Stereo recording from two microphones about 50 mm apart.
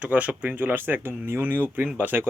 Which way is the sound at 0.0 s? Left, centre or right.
Right.